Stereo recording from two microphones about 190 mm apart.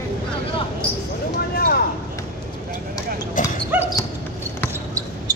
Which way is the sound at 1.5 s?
55° left (ahead or behind).